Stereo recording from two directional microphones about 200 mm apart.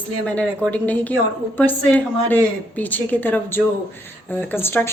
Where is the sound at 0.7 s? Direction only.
10° left (ahead or behind).